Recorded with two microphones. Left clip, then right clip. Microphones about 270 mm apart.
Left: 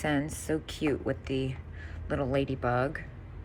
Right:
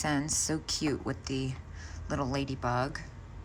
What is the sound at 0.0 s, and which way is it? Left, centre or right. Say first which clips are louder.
Speech: even; centre.